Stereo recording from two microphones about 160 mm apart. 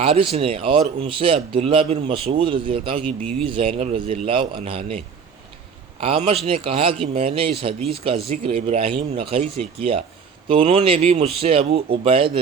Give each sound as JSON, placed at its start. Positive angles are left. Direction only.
{"t": 0.0, "sound": "speech", "side_deg": -35}